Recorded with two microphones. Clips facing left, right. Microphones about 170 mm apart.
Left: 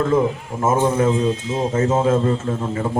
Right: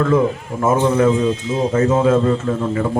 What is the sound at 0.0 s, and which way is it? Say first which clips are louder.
A man's voice: right 2 dB; 20° left (ahead or behind).